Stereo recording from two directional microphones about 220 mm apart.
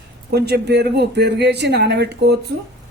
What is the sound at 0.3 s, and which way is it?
Speech, 50° right (ahead or behind).